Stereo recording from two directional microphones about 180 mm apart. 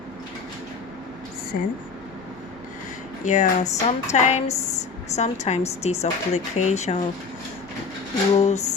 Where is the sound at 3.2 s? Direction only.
40° left (ahead or behind).